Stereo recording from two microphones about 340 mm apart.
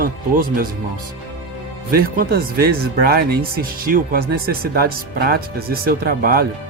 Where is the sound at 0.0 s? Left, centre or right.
Right.